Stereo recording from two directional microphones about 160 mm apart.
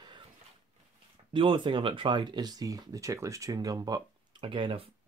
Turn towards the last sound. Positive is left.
turn(degrees=-35)  # may be behind; listen again after turning